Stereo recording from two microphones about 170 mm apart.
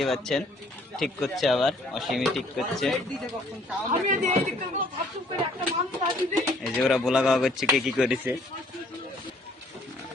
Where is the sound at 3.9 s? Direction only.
45° right (ahead or behind).